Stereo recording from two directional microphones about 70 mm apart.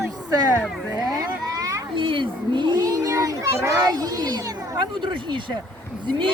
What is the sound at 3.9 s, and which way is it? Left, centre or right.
Speech, right.